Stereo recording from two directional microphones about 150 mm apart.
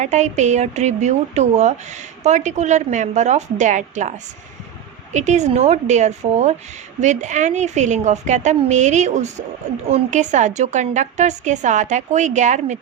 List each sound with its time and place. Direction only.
0.0 s a woman's voice: 50° right (ahead or behind)
5.1 s a woman's voice: 50° right (ahead or behind)